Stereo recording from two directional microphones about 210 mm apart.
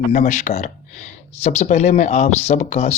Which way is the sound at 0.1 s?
35° left (ahead or behind).